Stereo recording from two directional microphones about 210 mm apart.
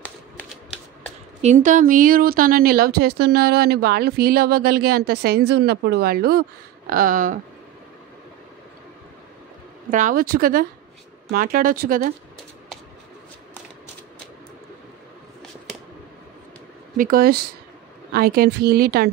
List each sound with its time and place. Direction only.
1.4 s speech: 35° right (ahead or behind)
9.8 s speech: 40° right (ahead or behind)
16.9 s speech: 40° right (ahead or behind)